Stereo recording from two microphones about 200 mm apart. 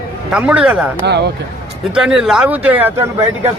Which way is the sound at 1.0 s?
55° right (ahead or behind).